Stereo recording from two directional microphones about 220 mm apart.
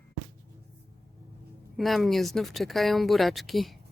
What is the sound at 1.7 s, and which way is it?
Speech, centre (ahead or behind).